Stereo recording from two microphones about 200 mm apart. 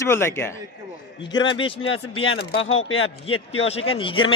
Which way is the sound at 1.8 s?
90° left.